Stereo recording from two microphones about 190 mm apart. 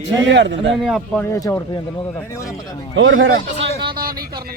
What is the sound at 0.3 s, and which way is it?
Speech, 70° right (ahead or behind).